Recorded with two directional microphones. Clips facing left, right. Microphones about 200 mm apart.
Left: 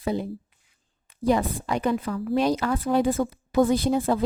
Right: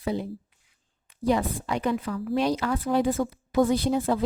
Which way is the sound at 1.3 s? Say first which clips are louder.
Left 2 dB; 45° left (ahead or behind).